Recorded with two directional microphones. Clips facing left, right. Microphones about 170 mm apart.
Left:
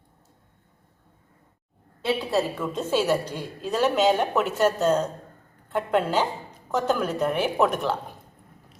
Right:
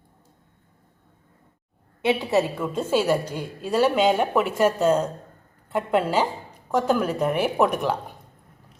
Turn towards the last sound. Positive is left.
turn(degrees=-10)  # may be behind; listen again after turning